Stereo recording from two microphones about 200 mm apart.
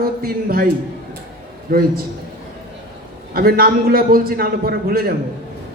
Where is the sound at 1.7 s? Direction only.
50° right (ahead or behind).